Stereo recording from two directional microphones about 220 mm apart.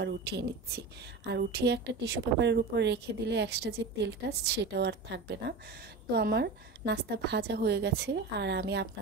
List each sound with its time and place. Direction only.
0.0 s a woman's voice: 50° right (ahead or behind)